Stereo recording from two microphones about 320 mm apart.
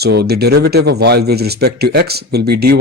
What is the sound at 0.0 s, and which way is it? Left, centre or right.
Speech, right.